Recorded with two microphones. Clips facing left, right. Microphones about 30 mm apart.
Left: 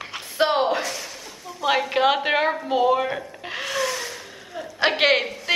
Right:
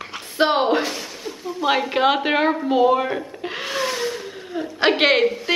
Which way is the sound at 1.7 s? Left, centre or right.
Centre.